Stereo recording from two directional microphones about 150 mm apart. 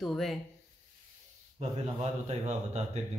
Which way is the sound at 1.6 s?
50° right (ahead or behind).